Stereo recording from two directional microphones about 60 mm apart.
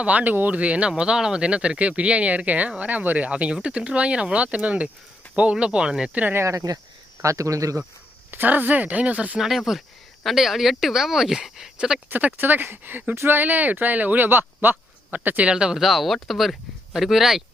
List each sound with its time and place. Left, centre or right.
0.0 s speech: right
6.5 s speech: right
7.2 s speech: right
8.3 s speech: right
9.4 s speech: centre
12.0 s speech: right
15.4 s speech: centre